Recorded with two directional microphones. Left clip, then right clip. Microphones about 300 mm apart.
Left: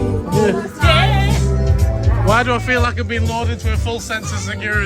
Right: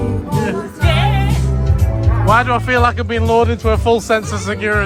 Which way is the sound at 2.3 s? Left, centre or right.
Centre.